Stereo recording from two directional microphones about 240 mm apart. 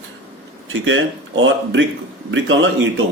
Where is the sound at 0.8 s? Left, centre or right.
Right.